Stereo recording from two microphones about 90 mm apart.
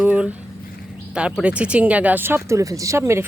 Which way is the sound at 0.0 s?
10° right (ahead or behind).